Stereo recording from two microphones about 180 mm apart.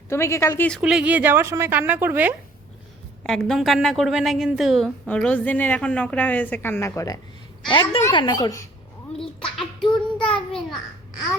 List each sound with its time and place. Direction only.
0.1 s a woman's voice: 15° left (ahead or behind)
0.8 s a woman's voice: 5° right (ahead or behind)
3.2 s a woman's voice: centre (ahead or behind); by 8.6 s 20° left (ahead or behind)
9.4 s a sound: 5° left (ahead or behind)